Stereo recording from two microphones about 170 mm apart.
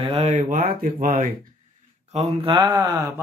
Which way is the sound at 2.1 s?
35° right (ahead or behind).